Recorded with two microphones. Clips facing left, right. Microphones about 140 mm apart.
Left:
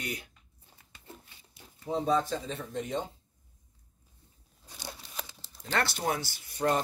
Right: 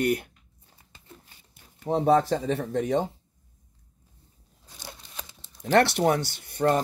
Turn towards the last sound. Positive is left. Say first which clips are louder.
# right 5 dB
turn(degrees=-55)  # may be behind; listen again after turning